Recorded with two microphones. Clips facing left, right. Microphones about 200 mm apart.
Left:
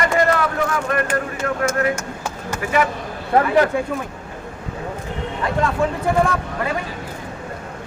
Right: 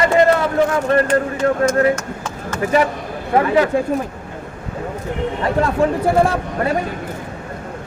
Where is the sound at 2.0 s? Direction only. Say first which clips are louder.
Right 1 dB; 10° left (ahead or behind).